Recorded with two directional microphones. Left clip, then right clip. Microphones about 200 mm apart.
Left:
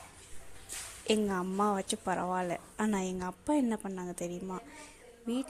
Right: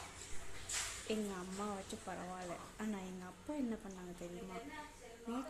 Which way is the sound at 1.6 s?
50° left (ahead or behind).